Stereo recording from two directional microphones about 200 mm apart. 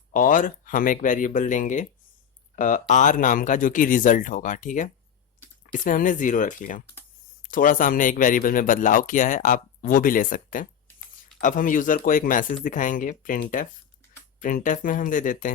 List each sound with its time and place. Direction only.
0.1 s speech: 40° left (ahead or behind)